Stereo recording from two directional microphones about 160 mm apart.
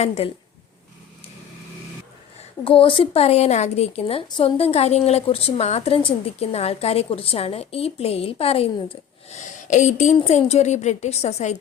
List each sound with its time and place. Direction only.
2.6 s a woman's voice: 35° left (ahead or behind)